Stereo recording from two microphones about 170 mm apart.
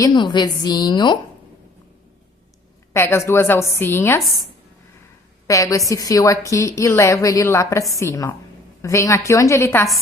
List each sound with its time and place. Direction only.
0.0 s a woman's voice: 25° left (ahead or behind)
2.9 s a woman's voice: 15° left (ahead or behind)
5.5 s a woman's voice: 20° left (ahead or behind)